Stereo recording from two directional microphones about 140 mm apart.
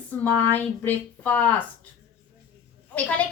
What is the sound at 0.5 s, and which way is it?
A woman's voice, 10° left (ahead or behind).